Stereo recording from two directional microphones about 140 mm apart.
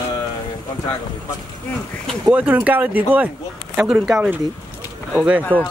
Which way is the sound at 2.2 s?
10° right (ahead or behind).